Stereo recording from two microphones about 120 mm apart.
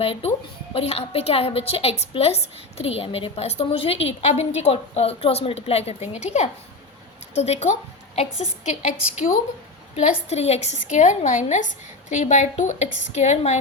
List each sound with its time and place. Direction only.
0.0 s a woman's voice: 55° left (ahead or behind)
9.9 s a woman's voice: 60° left (ahead or behind)